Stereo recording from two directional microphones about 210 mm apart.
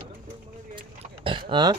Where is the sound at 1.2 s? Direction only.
25° right (ahead or behind).